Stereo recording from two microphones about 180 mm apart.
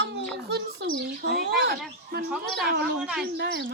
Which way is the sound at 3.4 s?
75° right (ahead or behind).